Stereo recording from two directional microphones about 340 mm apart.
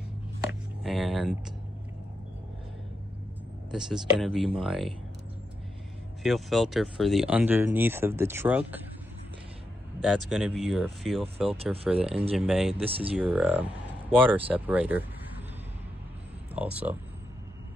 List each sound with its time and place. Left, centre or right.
0.8 s speech: centre
3.7 s speech: centre
6.2 s speech: centre
10.3 s speech: centre
11.4 s speech: centre
11.8 s speech: centre
16.5 s speech: centre